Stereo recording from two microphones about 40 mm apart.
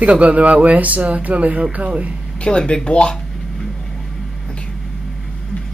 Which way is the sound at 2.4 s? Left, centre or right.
Left.